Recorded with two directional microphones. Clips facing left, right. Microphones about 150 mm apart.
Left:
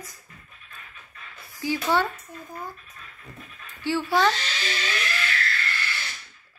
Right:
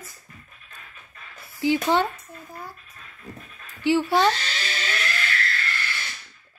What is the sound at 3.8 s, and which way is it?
Speech, 15° right (ahead or behind).